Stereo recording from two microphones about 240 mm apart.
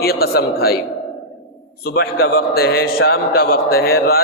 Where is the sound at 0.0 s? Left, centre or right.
Left.